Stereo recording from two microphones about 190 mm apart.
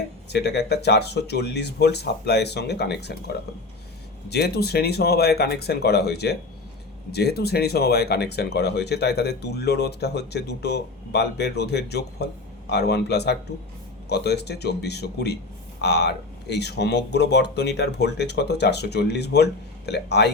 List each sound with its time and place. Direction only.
0.3 s speech: 60° left (ahead or behind)